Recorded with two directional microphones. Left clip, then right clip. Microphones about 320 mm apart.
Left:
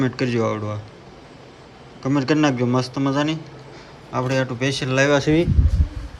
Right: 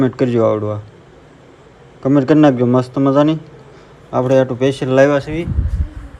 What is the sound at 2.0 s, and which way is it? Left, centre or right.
Speech, centre.